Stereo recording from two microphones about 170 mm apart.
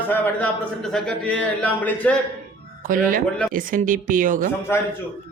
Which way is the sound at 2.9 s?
55° right (ahead or behind).